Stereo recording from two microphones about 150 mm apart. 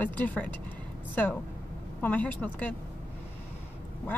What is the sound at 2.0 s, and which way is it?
Speech, 10° left (ahead or behind).